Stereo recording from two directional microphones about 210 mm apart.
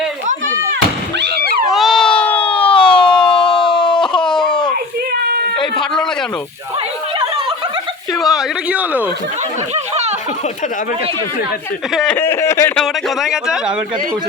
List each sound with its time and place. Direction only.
1.7 s a sound: centre (ahead or behind)
5.1 s a sound: 45° right (ahead or behind)
8.2 s speech: centre (ahead or behind)
9.7 s snicker: 30° right (ahead or behind)
11.9 s speech: 5° left (ahead or behind)
12.8 s speech: centre (ahead or behind)